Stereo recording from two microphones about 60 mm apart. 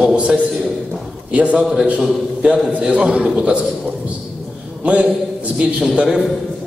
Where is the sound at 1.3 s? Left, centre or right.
Right.